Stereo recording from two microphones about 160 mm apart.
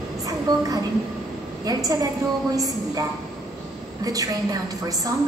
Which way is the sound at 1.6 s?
25° right (ahead or behind).